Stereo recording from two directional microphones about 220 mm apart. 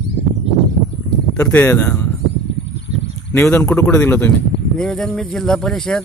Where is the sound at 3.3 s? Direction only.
5° left (ahead or behind).